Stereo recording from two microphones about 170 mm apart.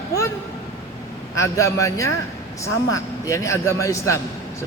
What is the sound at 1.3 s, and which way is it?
Speech, 20° left (ahead or behind).